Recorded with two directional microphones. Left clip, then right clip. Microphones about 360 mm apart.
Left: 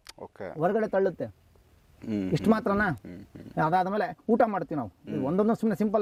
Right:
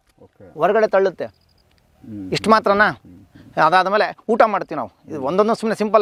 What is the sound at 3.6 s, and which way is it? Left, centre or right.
Speech, centre.